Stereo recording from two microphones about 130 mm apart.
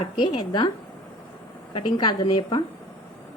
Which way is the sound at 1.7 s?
35° left (ahead or behind).